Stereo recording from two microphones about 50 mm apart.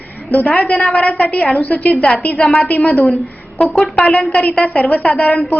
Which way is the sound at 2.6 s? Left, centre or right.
Left.